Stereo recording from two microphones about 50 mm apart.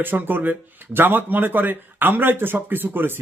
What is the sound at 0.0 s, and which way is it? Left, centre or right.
A man's voice, right.